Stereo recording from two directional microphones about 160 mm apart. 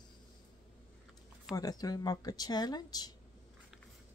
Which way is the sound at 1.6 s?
25° left (ahead or behind).